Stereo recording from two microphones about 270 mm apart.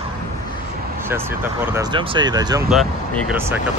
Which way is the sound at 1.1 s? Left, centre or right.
Centre.